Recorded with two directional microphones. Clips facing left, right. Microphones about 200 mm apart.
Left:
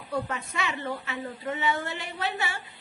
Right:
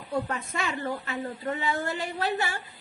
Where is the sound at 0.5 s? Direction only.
45° right (ahead or behind).